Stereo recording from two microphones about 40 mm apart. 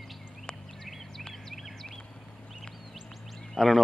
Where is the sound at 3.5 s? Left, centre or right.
Centre.